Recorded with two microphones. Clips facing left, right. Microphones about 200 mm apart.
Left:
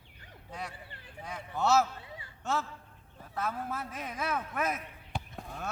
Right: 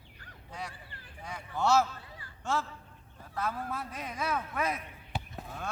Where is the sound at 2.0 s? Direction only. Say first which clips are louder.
Left 3 dB; 25° left (ahead or behind).